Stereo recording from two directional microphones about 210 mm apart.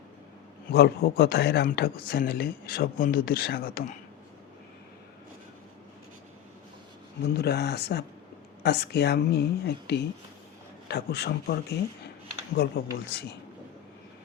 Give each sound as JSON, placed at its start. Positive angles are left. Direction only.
{"t": 0.7, "sound": "a man's voice", "side_deg": 45}
{"t": 7.3, "sound": "a man's voice", "side_deg": 50}
{"t": 12.5, "sound": "a man's voice", "side_deg": 50}